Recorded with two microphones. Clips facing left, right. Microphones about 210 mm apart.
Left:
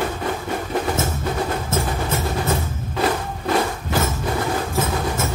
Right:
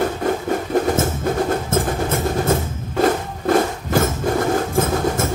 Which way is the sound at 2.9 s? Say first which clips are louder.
Right 4 dB; 45° right (ahead or behind).